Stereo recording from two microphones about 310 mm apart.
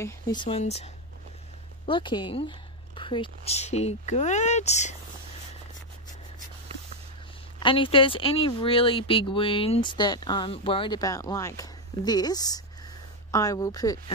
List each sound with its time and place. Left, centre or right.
0.0 s speech: centre
1.9 s a woman's voice: centre
7.6 s speech: centre